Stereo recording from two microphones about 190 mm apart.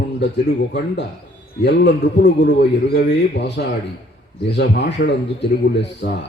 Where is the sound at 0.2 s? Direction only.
65° left (ahead or behind).